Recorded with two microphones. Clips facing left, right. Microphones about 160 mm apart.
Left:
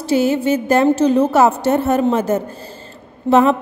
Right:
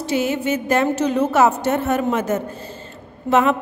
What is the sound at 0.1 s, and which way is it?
A woman's voice, 35° left (ahead or behind).